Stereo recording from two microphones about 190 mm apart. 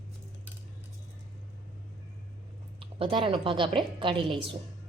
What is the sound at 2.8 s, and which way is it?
A woman's voice, 30° right (ahead or behind).